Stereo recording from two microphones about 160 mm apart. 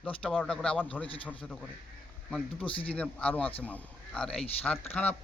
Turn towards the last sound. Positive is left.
turn(degrees=10)  # may be behind; listen again after turning